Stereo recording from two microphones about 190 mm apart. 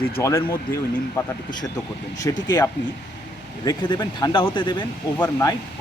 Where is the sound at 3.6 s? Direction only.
20° left (ahead or behind).